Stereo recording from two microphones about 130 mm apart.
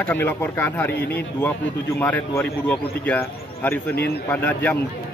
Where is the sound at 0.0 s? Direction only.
15° left (ahead or behind).